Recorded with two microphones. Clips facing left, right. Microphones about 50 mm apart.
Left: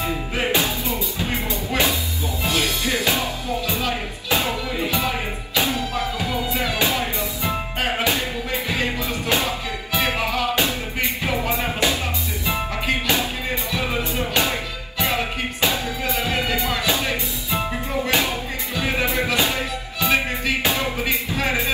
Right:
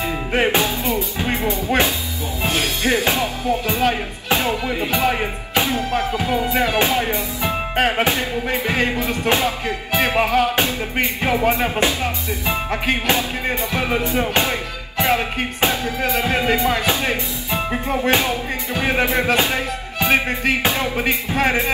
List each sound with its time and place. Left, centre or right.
0.0 s music: right